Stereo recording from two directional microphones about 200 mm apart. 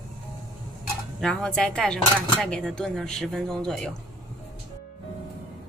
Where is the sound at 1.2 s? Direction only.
5° left (ahead or behind).